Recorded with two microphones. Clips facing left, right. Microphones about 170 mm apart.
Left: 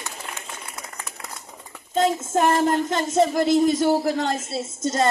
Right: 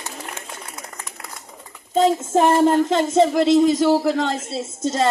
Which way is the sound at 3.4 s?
85° right.